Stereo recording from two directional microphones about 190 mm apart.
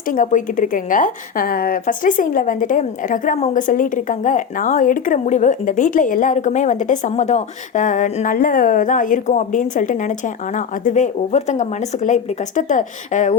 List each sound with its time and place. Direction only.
0.1 s a woman's voice: 40° left (ahead or behind)